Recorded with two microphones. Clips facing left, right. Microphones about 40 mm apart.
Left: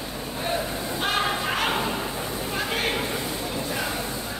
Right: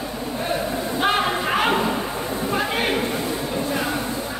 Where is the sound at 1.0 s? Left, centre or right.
Centre.